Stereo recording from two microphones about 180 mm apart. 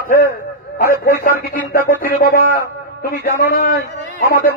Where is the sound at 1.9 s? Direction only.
50° left (ahead or behind).